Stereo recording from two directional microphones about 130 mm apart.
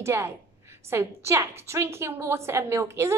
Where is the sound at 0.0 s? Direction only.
20° right (ahead or behind).